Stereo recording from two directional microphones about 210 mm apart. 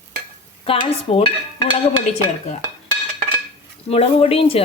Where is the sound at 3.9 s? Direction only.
30° left (ahead or behind).